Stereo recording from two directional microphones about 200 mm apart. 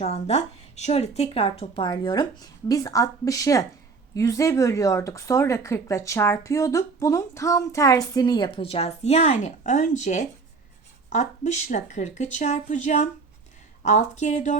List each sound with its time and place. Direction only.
0.0 s speech: 30° left (ahead or behind)